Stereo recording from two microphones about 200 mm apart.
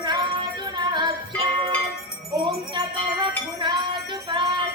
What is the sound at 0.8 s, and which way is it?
Music, 20° right (ahead or behind).